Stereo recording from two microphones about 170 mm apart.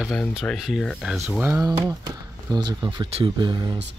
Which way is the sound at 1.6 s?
20° right (ahead or behind).